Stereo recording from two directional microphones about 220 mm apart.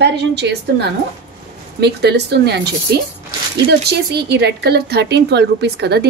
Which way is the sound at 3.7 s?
45° right (ahead or behind).